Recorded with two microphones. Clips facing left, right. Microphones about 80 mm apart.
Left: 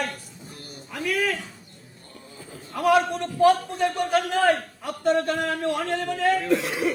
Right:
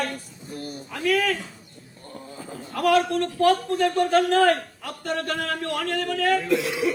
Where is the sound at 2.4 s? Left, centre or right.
Right.